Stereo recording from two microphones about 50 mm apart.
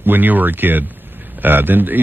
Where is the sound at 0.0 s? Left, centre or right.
Right.